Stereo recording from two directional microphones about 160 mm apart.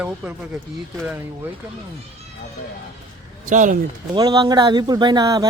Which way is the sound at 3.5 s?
50° right (ahead or behind).